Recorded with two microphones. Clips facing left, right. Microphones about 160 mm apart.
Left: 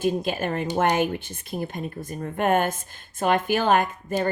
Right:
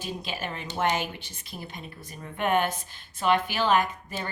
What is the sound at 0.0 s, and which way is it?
A woman's voice, 50° left (ahead or behind).